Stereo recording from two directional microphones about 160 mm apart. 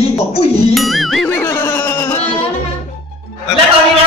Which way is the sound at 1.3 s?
15° left (ahead or behind).